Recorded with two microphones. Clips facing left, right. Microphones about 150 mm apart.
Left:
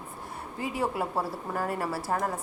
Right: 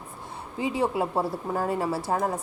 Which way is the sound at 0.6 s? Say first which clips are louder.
Right 4 dB; 20° right (ahead or behind).